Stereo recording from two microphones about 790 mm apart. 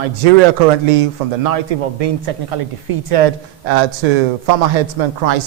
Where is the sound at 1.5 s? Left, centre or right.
Right.